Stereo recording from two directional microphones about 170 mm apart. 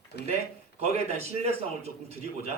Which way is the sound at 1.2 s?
35° right (ahead or behind).